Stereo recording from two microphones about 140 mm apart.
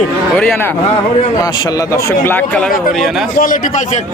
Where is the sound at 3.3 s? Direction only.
75° left (ahead or behind).